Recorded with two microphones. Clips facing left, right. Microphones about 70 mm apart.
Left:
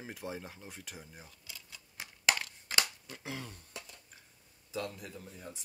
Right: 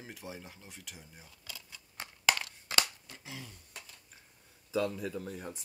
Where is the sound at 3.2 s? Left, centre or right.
Left.